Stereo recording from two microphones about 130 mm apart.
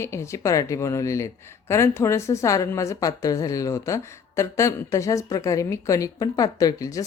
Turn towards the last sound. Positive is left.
turn(degrees=25)  # may be behind; listen again after turning